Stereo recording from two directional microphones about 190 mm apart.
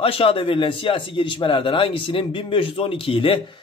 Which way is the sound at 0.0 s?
30° left (ahead or behind).